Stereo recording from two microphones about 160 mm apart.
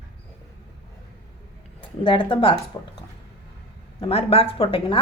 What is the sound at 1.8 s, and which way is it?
Speech, 30° left (ahead or behind).